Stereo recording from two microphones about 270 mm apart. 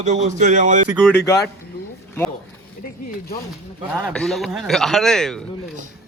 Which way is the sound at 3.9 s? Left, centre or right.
Centre.